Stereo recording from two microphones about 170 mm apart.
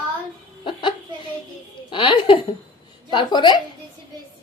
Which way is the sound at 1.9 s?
30° left (ahead or behind).